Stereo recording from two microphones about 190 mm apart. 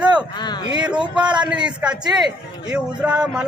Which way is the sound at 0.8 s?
5° right (ahead or behind).